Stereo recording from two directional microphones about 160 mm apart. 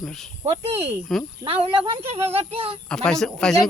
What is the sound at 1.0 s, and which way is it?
Speech, centre (ahead or behind).